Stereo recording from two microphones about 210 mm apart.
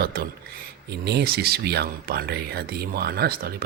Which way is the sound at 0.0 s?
45° right (ahead or behind).